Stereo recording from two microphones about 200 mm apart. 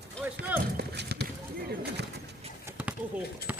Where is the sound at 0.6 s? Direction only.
55° right (ahead or behind).